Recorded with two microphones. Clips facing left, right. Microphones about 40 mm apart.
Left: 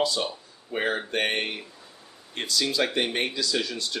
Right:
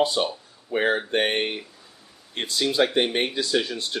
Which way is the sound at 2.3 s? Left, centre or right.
Right.